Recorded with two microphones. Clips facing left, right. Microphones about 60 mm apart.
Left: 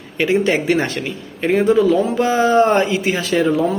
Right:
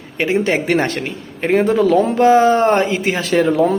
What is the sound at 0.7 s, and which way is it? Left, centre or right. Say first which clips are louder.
Speech: right 1 dB; right.